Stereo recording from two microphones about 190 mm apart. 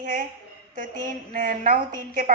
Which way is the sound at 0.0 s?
45° right (ahead or behind).